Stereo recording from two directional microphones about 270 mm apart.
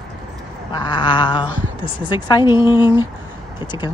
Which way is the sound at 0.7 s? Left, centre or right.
Centre.